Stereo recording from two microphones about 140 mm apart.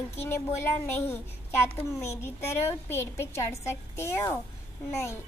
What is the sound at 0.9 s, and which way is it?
Child singing, 15° left (ahead or behind).